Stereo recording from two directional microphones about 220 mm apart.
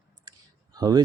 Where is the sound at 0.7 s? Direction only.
15° right (ahead or behind).